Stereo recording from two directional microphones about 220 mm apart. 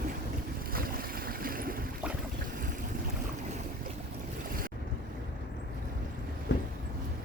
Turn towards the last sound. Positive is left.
turn(degrees=55)  # may be behind; listen again after turning